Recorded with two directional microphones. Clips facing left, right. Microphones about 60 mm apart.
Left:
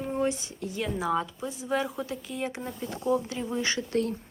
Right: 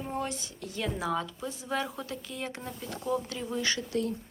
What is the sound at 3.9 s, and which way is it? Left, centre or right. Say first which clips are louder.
Speech: left 5 dB; left.